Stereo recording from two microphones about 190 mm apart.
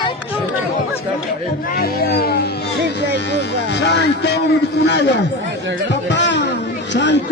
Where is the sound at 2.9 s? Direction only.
65° left (ahead or behind).